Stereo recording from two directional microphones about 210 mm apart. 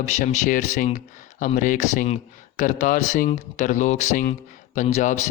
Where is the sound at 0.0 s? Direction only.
30° left (ahead or behind).